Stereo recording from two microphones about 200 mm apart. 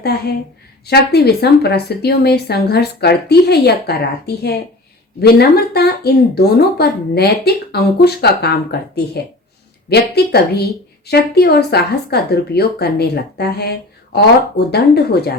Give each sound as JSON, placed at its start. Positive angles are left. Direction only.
{"t": 0.9, "sound": "speech", "side_deg": 55}
{"t": 9.9, "sound": "speech", "side_deg": 55}